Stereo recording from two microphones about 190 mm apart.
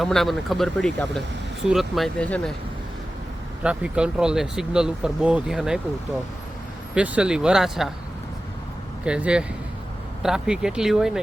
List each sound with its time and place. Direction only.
0.0 s speech: centre (ahead or behind)
3.6 s speech: 5° right (ahead or behind)
6.9 s speech: 5° right (ahead or behind)
9.0 s speech: 5° right (ahead or behind)